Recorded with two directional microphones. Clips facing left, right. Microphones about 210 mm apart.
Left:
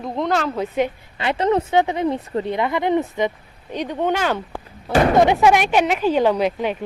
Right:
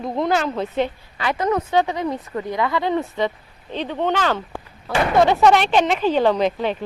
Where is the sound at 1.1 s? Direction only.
25° left (ahead or behind).